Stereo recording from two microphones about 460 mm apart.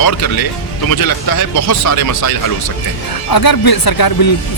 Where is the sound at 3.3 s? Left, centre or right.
Left.